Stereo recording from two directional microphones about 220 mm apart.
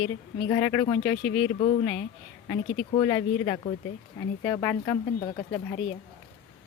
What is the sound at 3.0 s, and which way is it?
Speech, 20° left (ahead or behind).